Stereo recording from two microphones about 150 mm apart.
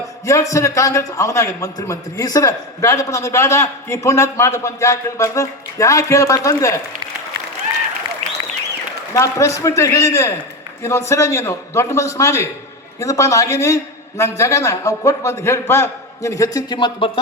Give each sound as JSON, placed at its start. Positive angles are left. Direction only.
{"t": 0.3, "sound": "a man's voice", "side_deg": 20}
{"t": 9.1, "sound": "a man's voice", "side_deg": 20}